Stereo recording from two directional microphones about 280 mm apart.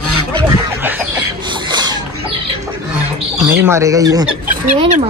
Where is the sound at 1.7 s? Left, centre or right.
Centre.